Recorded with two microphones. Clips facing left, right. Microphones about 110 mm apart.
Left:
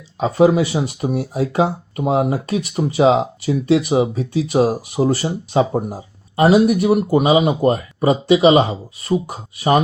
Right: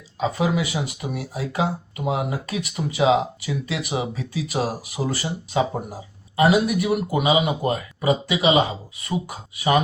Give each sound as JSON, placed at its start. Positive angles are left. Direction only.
{"t": 0.2, "sound": "speech", "side_deg": 35}